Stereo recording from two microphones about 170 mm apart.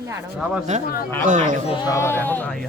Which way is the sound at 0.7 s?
45° right (ahead or behind).